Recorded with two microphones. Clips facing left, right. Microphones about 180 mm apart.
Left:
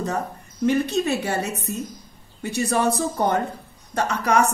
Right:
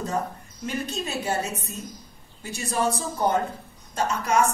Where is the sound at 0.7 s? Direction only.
70° left (ahead or behind).